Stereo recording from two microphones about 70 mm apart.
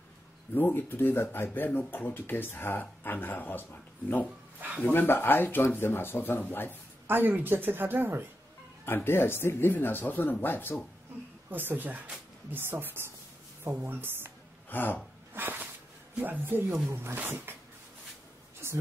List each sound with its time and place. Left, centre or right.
0.6 s speech: left
4.6 s speech: right
4.8 s speech: left
7.1 s speech: right
8.8 s speech: left
11.5 s speech: right
14.7 s speech: left
15.3 s a sound: right
16.2 s speech: right